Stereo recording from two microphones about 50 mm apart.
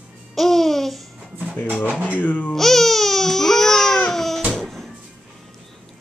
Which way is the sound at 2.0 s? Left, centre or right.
Left.